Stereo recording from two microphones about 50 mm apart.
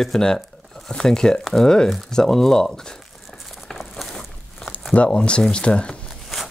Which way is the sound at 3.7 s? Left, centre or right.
Centre.